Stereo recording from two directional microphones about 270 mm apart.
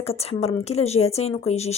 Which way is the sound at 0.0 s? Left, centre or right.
Left.